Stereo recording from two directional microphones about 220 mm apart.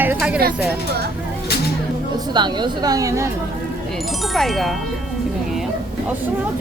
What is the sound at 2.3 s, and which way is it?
Speech, 20° right (ahead or behind).